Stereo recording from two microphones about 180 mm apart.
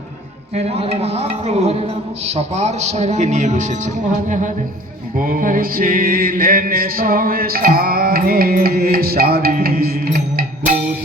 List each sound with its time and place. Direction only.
0.5 s a man's voice: 35° right (ahead or behind)
5.1 s mantra: 50° right (ahead or behind)